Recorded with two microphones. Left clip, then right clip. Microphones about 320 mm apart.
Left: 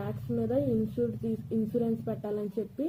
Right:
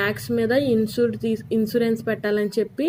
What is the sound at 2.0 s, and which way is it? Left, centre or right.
Speech, right.